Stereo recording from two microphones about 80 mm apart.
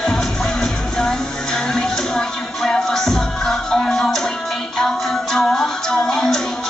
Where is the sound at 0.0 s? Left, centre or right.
Centre.